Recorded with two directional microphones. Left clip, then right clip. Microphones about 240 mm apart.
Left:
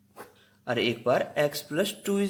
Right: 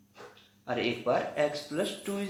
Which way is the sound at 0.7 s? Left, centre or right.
Left.